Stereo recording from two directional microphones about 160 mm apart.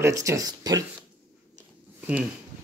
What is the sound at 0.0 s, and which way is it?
Speech, 20° right (ahead or behind).